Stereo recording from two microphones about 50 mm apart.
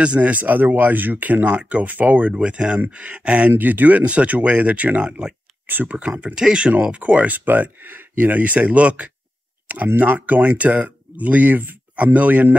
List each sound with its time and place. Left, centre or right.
0.0 s speech: right
2.4 s speech: right